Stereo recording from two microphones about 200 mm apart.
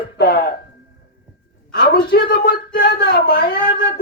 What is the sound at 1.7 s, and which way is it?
Speech, 60° left (ahead or behind).